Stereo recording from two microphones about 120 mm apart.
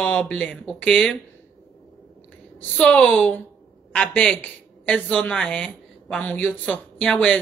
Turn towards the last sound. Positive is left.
turn(degrees=5)  # may be behind; listen again after turning